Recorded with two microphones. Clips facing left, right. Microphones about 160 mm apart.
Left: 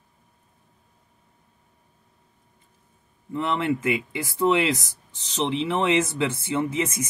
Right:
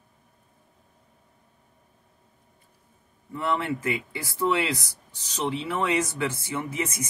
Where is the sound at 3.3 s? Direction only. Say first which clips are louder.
Left 3 dB; 20° left (ahead or behind).